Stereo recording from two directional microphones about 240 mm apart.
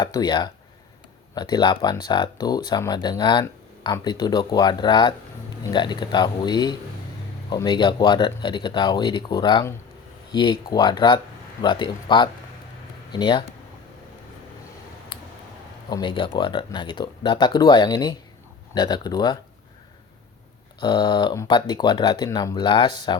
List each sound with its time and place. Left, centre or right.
0.0 s speech: centre
15.9 s speech: centre
20.8 s speech: centre